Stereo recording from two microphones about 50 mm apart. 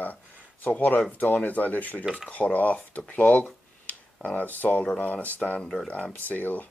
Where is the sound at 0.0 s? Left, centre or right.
Left.